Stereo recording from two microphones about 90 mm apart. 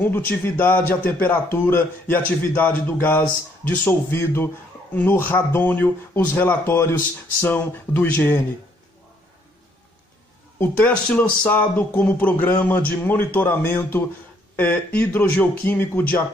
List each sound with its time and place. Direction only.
0.0 s speech: 20° left (ahead or behind)
10.6 s speech: 15° left (ahead or behind)